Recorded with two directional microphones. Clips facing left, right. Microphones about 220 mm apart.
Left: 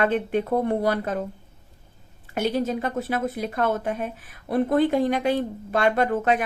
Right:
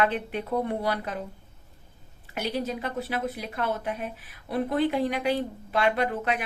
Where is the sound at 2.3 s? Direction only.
45° left (ahead or behind).